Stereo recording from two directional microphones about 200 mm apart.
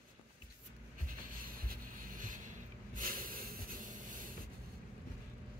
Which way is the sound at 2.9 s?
45° right (ahead or behind).